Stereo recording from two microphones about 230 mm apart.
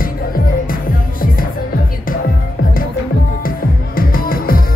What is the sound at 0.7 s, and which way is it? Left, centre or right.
Music, left.